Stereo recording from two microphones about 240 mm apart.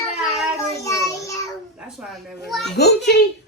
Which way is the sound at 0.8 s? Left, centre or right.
Centre.